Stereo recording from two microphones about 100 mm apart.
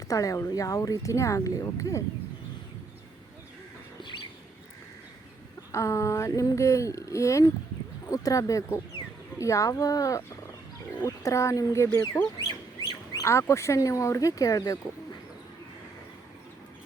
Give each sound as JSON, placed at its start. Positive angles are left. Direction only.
{"t": 0.1, "sound": "speech", "side_deg": 35}
{"t": 4.0, "sound": "bird", "side_deg": 55}
{"t": 5.7, "sound": "speech", "side_deg": 30}
{"t": 13.1, "sound": "speech", "side_deg": 30}